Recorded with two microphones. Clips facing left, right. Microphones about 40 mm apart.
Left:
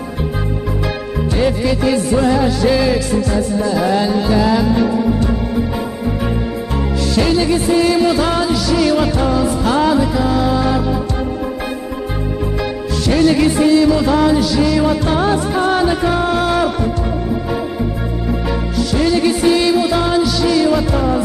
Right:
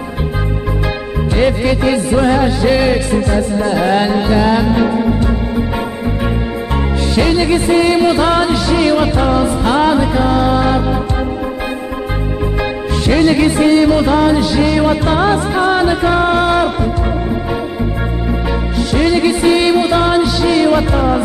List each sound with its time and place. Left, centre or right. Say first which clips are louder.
1.3 s music: right 3 dB; right
4.3 s music: even; right
7.2 s music: right 2 dB; right
13.1 s music: right 1 dB; right
18.8 s music: right 2 dB; right